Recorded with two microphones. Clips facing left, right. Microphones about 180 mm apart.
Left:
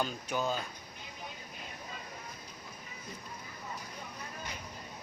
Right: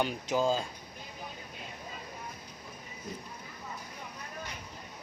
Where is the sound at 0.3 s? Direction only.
30° right (ahead or behind).